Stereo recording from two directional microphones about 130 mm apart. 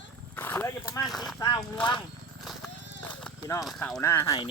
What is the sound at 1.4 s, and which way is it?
Speech, 30° left (ahead or behind).